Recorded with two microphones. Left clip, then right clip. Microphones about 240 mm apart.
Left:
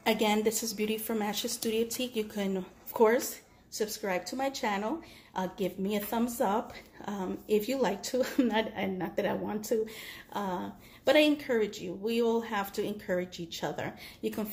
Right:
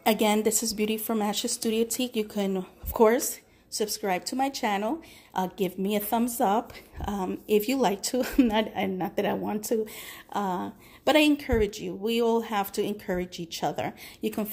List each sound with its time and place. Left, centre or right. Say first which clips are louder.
0.0 s a woman's voice: right 4 dB; right